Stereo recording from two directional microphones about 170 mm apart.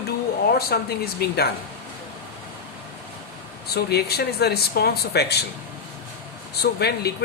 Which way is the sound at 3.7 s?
70° left (ahead or behind).